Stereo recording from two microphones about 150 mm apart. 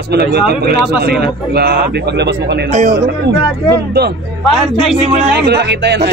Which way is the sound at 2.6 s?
55° right (ahead or behind).